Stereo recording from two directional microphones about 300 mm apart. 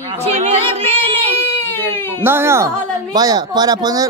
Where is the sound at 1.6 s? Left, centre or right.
Centre.